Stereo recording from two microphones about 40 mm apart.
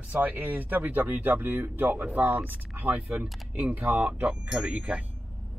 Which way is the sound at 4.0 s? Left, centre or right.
Right.